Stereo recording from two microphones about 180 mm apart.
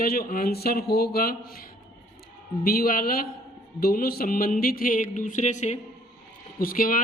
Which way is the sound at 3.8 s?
60° left (ahead or behind).